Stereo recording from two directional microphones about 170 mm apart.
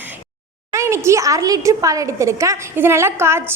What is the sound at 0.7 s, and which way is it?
A woman's voice, 15° right (ahead or behind).